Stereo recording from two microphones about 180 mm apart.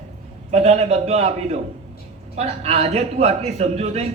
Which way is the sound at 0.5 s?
35° right (ahead or behind).